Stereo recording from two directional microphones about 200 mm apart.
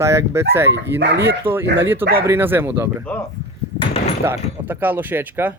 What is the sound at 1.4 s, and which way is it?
Speech, 10° right (ahead or behind).